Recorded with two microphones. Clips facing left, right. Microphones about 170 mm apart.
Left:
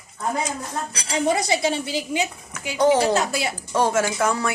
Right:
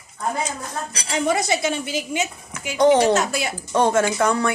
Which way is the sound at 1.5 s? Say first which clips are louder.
Even; 30° left (ahead or behind).